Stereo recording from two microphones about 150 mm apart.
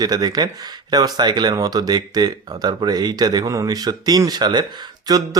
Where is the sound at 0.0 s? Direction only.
25° right (ahead or behind).